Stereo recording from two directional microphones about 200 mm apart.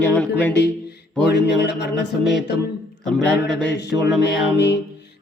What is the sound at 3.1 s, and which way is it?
Speech, centre (ahead or behind).